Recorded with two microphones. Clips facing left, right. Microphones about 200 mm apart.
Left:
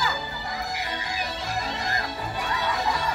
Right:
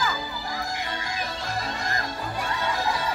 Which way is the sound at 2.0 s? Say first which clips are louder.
Even; centre (ahead or behind).